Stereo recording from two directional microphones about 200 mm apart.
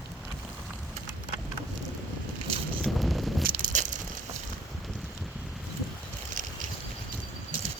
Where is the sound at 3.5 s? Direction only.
40° right (ahead or behind).